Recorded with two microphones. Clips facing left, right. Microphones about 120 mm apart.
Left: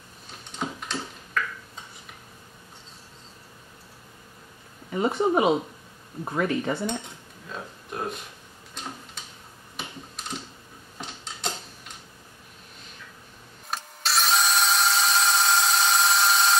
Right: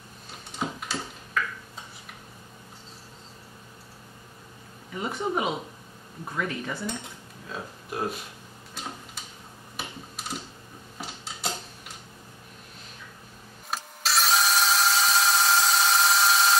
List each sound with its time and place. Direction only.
0.5 s tick-tock: 5° right (ahead or behind)
4.9 s speech: 30° left (ahead or behind)
7.0 s cutlery: 5° right (ahead or behind)
8.8 s tick-tock: 5° right (ahead or behind)
9.8 s computer keyboard: 5° right (ahead or behind)
11.0 s a sound: 5° right (ahead or behind)
13.7 s tools: centre (ahead or behind)